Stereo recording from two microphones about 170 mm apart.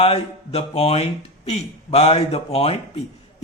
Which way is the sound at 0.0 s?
35° left (ahead or behind).